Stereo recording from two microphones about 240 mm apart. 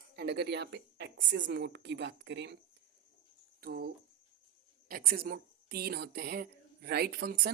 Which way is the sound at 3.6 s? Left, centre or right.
Right.